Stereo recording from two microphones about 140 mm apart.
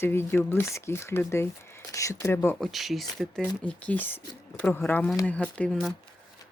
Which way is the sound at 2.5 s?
Centre (ahead or behind).